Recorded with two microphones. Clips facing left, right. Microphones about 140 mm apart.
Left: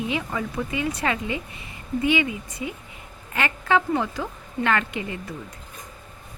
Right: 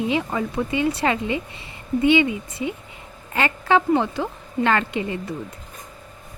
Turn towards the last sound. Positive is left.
turn(degrees=-30)  # may be behind; listen again after turning